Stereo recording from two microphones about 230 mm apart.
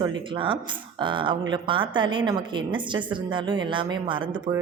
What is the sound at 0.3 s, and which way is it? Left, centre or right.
A woman's voice, right.